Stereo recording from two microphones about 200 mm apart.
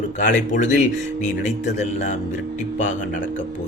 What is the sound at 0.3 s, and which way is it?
Speech, 40° left (ahead or behind).